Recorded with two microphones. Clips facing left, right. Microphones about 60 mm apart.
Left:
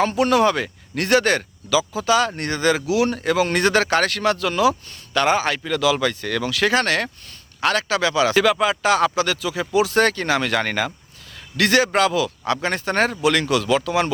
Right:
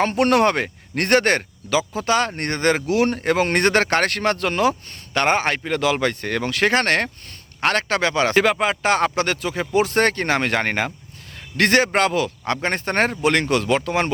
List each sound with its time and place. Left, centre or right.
0.0 s speech: right